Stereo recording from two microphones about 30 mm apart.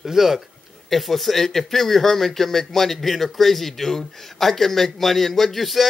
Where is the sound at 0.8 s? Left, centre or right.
Centre.